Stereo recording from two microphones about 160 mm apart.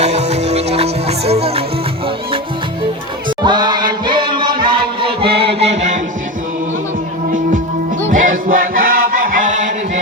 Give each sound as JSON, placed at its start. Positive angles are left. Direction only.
{"t": 0.0, "sound": "music", "side_deg": -45}
{"t": 3.2, "sound": "chant", "side_deg": -30}
{"t": 5.4, "sound": "music", "side_deg": -40}
{"t": 8.1, "sound": "chant", "side_deg": -55}